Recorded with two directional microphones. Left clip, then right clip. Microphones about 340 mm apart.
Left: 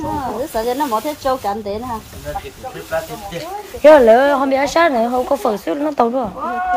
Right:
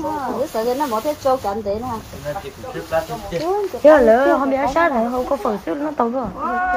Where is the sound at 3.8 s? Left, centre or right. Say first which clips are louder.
Left 4 dB; centre.